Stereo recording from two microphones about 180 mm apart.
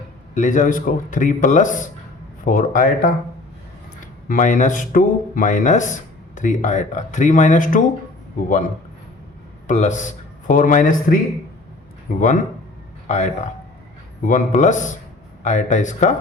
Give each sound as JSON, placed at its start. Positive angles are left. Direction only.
{"t": 0.3, "sound": "speech", "side_deg": 45}
{"t": 4.3, "sound": "a man's voice", "side_deg": 45}